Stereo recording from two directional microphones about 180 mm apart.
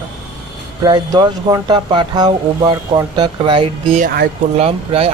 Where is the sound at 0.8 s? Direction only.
25° right (ahead or behind).